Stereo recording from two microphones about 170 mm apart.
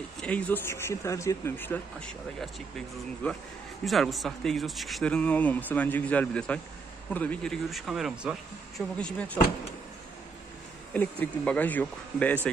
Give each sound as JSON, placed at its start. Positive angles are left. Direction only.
{"t": 0.2, "sound": "speech", "side_deg": 5}
{"t": 3.8, "sound": "speech", "side_deg": 0}
{"t": 8.9, "sound": "speech", "side_deg": 5}
{"t": 10.9, "sound": "speech", "side_deg": 10}